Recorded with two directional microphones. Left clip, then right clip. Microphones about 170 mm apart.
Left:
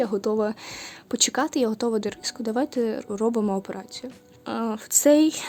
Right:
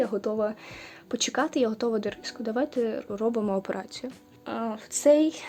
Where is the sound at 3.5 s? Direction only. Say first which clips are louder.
Right 2 dB; 20° left (ahead or behind).